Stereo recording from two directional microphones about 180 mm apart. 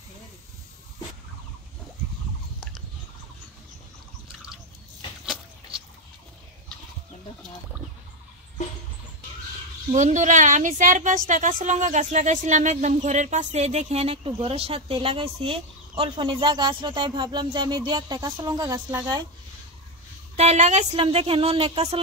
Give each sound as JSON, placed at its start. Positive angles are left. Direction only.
{"t": 5.2, "sound": "rodents", "side_deg": 0}
{"t": 9.9, "sound": "a woman's voice", "side_deg": -40}
{"t": 20.3, "sound": "a woman's voice", "side_deg": -40}